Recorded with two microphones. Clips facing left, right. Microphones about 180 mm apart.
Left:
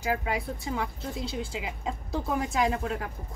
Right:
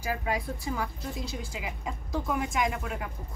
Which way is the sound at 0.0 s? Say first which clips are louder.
Left 2 dB; 20° left (ahead or behind).